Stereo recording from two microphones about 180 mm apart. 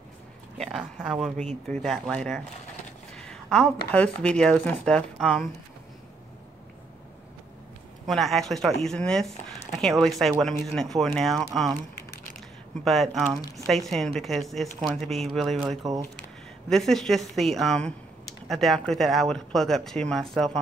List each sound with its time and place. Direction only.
0.6 s speech: centre (ahead or behind)
1.3 s speech: 40° right (ahead or behind)
1.7 s speech: 5° left (ahead or behind)
8.1 s speech: centre (ahead or behind)
12.8 s speech: centre (ahead or behind)